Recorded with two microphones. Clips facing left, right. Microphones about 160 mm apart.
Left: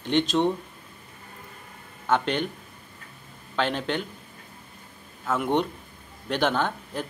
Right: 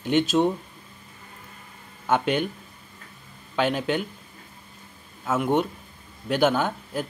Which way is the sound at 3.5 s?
10° right (ahead or behind).